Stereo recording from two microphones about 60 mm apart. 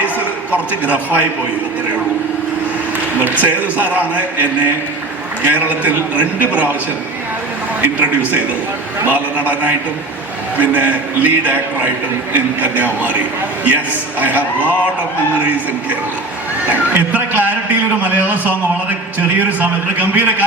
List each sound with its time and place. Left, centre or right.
0.5 s a man's voice: right
3.2 s a man's voice: right
5.5 s a man's voice: right
9.0 s a man's voice: right